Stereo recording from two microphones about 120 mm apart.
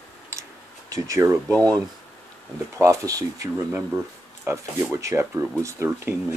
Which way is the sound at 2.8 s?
25° right (ahead or behind).